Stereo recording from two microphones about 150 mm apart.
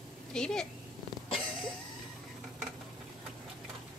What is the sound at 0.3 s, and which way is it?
Speech, 5° left (ahead or behind).